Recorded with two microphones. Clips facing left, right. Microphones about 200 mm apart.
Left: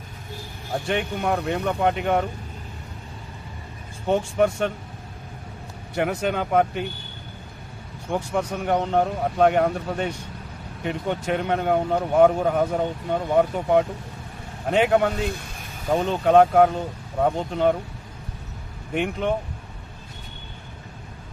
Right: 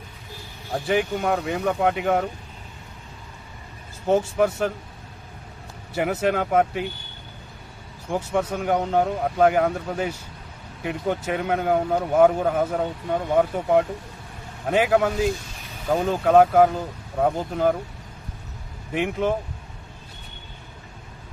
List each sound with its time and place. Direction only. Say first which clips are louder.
0.7 s speech: right 3 dB; centre (ahead or behind)
4.0 s speech: right 1 dB; 5° right (ahead or behind)
5.9 s speech: right 1 dB; 5° right (ahead or behind)
8.1 s speech: right 1 dB; centre (ahead or behind)
15.1 s speech: right 4 dB; 60° left (ahead or behind)
15.9 s speech: even; 5° right (ahead or behind)
18.9 s speech: right 1 dB; 5° right (ahead or behind)